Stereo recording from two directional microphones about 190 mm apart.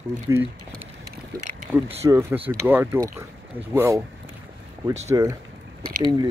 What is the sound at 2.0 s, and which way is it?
Speech, 15° right (ahead or behind).